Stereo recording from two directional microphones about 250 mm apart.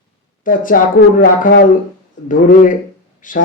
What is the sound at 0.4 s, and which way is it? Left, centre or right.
Speech, left.